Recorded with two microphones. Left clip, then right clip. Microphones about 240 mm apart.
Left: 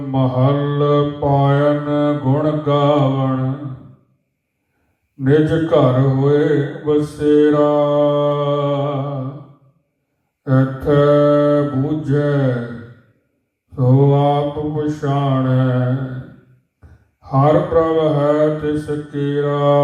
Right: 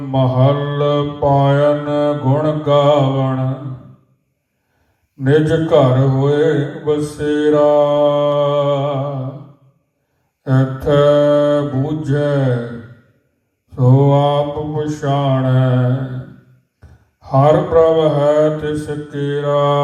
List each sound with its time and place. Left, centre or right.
0.1 s mantra: right
5.2 s mantra: right
10.4 s mantra: right
13.7 s mantra: right
17.2 s mantra: right